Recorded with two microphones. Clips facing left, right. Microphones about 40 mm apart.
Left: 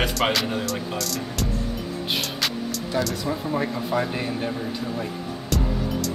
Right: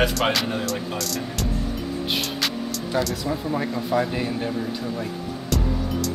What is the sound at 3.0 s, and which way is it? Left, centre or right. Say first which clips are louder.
Speech: even; centre.